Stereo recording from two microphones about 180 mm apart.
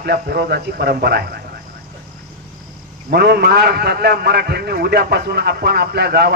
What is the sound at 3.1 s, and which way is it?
A man's voice, 65° right (ahead or behind).